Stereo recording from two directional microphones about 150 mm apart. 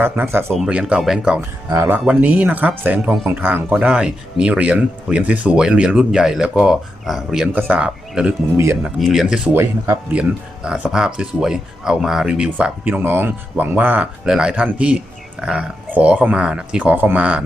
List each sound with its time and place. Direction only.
0.0 s speech: 15° right (ahead or behind)
0.5 s speech: 5° right (ahead or behind)
1.4 s speech: 20° right (ahead or behind)
8.5 s speech: 15° right (ahead or behind)
9.0 s speech: centre (ahead or behind)
9.6 s speech: 15° right (ahead or behind)